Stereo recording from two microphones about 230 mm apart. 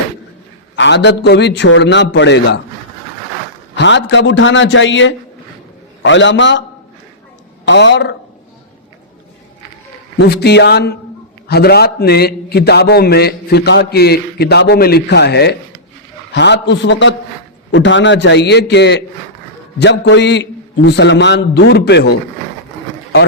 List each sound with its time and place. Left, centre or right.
0.8 s a man's voice: left
3.8 s a man's voice: left
7.6 s a man's voice: left
10.2 s a man's voice: left